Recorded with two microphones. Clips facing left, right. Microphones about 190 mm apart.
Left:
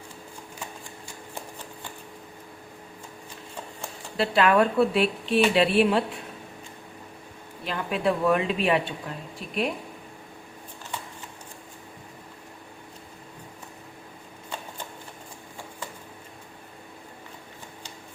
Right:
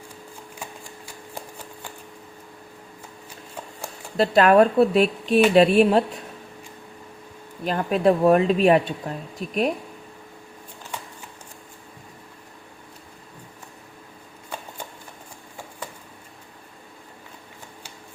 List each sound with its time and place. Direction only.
4.2 s speech: 40° right (ahead or behind)
7.6 s speech: 40° right (ahead or behind)